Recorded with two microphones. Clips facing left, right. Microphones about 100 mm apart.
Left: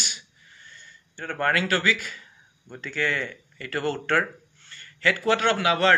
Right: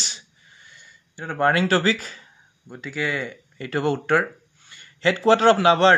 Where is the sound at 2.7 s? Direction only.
10° right (ahead or behind).